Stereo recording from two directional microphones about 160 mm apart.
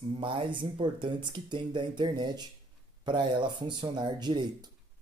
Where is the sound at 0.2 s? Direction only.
35° right (ahead or behind).